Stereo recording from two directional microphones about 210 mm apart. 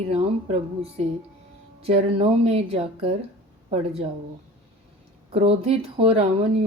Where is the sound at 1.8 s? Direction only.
30° right (ahead or behind).